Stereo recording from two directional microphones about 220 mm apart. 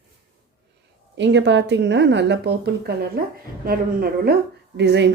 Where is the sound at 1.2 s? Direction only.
55° right (ahead or behind).